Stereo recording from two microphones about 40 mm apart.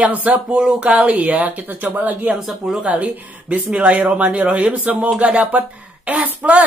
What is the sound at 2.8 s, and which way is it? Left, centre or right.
Speech, right.